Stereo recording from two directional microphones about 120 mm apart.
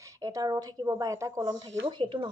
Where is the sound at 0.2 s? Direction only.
30° right (ahead or behind).